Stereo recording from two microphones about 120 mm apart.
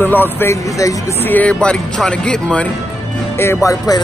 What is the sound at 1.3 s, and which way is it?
Speech, 10° left (ahead or behind).